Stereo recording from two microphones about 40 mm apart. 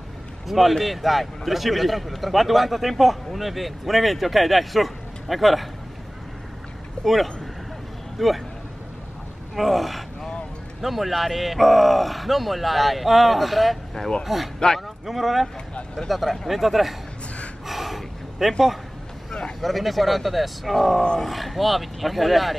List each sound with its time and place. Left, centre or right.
0.5 s a man's voice: centre
7.0 s a sound: left
8.2 s a man's voice: centre
9.6 s a man's voice: centre
17.6 s a sound: centre
19.6 s a man's voice: centre